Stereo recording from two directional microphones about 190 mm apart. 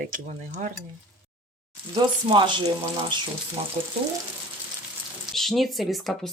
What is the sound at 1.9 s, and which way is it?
Speech, 25° right (ahead or behind).